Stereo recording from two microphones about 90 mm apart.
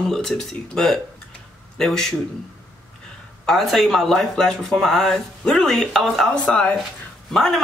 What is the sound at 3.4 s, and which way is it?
A woman's voice, 5° left (ahead or behind).